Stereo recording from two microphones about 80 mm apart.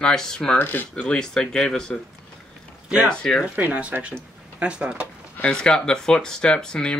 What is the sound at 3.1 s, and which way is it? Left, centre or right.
Speech, centre.